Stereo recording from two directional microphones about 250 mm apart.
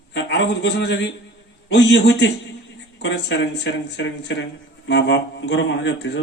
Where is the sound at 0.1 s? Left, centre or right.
Left.